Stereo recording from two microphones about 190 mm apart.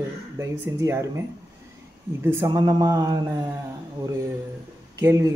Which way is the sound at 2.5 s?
20° right (ahead or behind).